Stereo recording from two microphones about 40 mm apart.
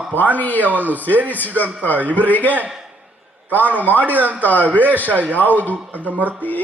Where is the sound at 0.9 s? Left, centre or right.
Left.